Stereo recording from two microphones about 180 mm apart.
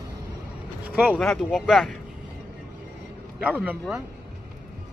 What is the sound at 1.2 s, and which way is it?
Speech, centre (ahead or behind).